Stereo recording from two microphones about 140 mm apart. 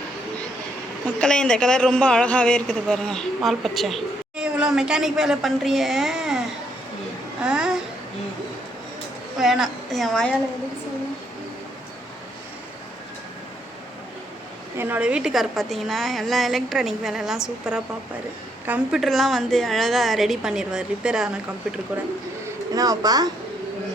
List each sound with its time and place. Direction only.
1.2 s a man's voice: 5° left (ahead or behind)
7.4 s a woman's voice: 5° right (ahead or behind)
9.4 s a man's voice: centre (ahead or behind)
14.8 s a man's voice: 10° right (ahead or behind)
22.4 s speech: 25° right (ahead or behind)